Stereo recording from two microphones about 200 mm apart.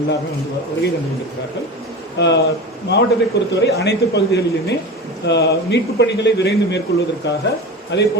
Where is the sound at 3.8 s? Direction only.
60° left (ahead or behind).